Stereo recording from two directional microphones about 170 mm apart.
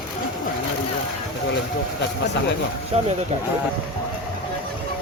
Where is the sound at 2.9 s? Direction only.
35° right (ahead or behind).